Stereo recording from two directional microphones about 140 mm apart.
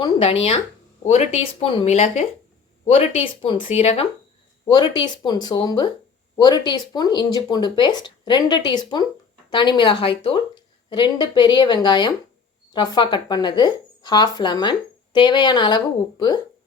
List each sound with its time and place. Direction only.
0.0 s a woman's voice: 40° left (ahead or behind)
1.0 s speech: 50° left (ahead or behind)
4.6 s a woman's voice: 30° left (ahead or behind)